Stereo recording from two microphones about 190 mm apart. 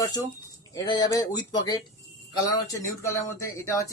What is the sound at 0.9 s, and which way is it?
Speech, 20° left (ahead or behind).